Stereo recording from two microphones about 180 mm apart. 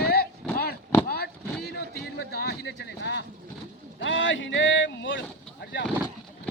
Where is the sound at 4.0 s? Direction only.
90° left.